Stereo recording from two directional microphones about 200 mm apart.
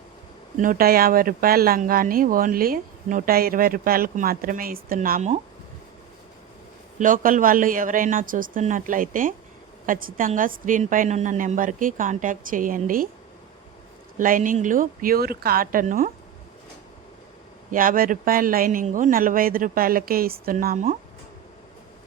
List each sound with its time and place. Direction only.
0.5 s speech: 45° right (ahead or behind)
7.0 s a woman's voice: 40° right (ahead or behind)
14.2 s speech: 40° right (ahead or behind)
17.7 s speech: 45° right (ahead or behind)